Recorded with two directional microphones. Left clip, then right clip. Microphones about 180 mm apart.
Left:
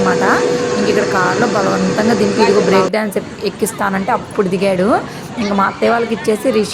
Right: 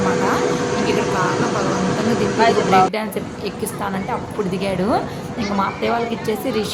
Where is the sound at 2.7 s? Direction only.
35° left (ahead or behind).